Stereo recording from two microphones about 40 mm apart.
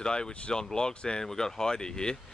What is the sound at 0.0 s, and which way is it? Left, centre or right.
Speech, left.